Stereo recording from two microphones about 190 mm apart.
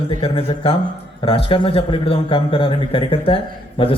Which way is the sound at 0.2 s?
30° left (ahead or behind).